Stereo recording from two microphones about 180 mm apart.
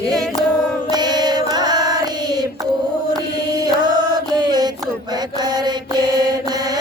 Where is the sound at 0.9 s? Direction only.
20° right (ahead or behind).